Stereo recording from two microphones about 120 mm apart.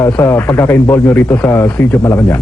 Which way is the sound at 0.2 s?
20° left (ahead or behind).